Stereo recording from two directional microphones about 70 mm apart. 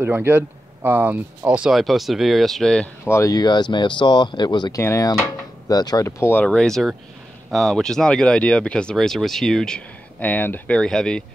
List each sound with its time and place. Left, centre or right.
0.0 s speech: right
1.7 s speech: centre
3.1 s a sound: left
3.3 s speech: left
4.7 s a sound: left
5.7 s speech: left
6.0 s speech: left
6.4 s speech: centre
8.9 s speech: centre
10.2 s speech: left
10.8 s speech: centre